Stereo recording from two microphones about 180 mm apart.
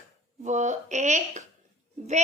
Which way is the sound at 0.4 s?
40° right (ahead or behind).